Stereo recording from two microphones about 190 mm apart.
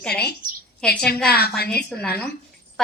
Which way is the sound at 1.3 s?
55° left (ahead or behind).